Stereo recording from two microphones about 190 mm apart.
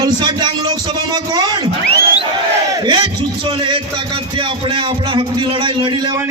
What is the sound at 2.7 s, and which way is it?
Battle cry, 20° right (ahead or behind).